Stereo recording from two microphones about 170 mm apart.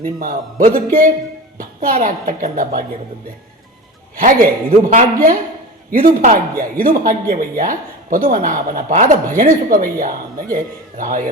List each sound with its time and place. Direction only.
0.2 s a woman's voice: 55° right (ahead or behind)
4.2 s a woman's voice: 55° right (ahead or behind)